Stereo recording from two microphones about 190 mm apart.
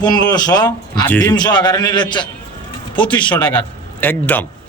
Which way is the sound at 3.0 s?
5° left (ahead or behind).